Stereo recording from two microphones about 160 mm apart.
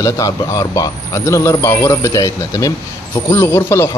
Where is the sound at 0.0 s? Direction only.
20° left (ahead or behind).